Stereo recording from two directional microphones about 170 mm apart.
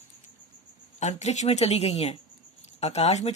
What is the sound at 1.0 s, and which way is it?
A woman's voice, 40° left (ahead or behind).